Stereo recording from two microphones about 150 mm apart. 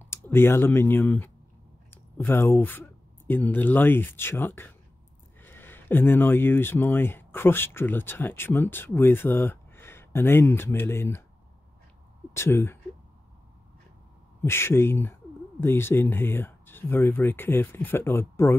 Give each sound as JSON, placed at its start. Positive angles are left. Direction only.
{"t": 0.0, "sound": "speech", "side_deg": 15}
{"t": 12.4, "sound": "speech", "side_deg": 15}
{"t": 14.4, "sound": "speech", "side_deg": 15}